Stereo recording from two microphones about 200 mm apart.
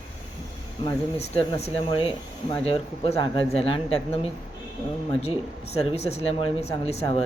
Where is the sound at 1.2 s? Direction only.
30° left (ahead or behind).